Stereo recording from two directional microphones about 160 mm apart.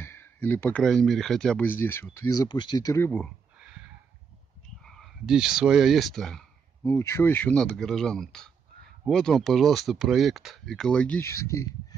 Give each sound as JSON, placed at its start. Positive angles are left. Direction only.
{"t": 0.0, "sound": "speech", "side_deg": 15}
{"t": 2.1, "sound": "speech", "side_deg": 25}
{"t": 4.8, "sound": "a sound", "side_deg": 0}
{"t": 6.9, "sound": "speech", "side_deg": 15}